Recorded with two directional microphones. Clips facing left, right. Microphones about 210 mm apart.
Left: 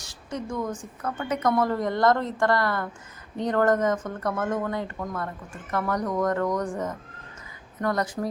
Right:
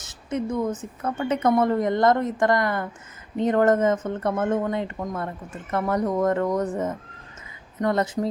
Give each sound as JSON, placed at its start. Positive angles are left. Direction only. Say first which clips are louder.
{"t": 0.0, "sound": "a woman's voice", "louder": "right 6 dB", "side_deg": -20}